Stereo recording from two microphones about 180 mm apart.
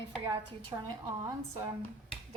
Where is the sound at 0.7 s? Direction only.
20° right (ahead or behind).